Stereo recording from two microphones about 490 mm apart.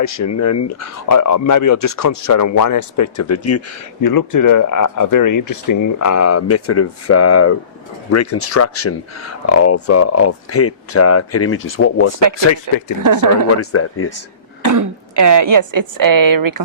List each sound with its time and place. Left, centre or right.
0.0 s speech: left
4.0 s speech: left
12.7 s speech: right
13.6 s speech: left
14.6 s a woman's voice: right